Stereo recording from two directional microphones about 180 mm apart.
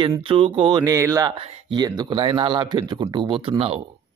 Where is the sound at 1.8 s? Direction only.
25° right (ahead or behind).